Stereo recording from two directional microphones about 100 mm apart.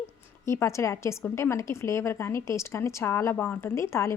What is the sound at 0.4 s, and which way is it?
A woman's voice, 30° left (ahead or behind).